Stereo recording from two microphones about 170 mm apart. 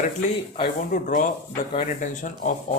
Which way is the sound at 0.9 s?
55° left (ahead or behind).